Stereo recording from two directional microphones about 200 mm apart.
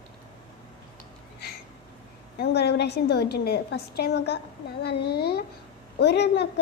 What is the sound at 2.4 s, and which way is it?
A woman's voice, 55° left (ahead or behind).